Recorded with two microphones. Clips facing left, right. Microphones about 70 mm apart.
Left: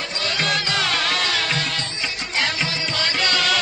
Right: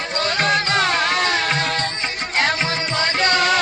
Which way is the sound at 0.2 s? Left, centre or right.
Right.